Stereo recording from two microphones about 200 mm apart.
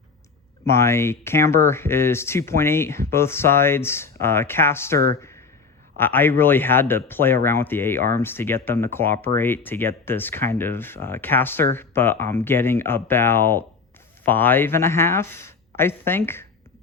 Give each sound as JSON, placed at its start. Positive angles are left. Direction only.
{"t": 0.6, "sound": "speech", "side_deg": 15}
{"t": 6.0, "sound": "speech", "side_deg": 10}